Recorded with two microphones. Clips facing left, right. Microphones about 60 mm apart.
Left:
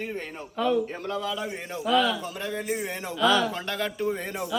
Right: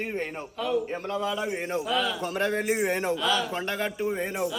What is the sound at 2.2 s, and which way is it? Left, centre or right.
Speech, right.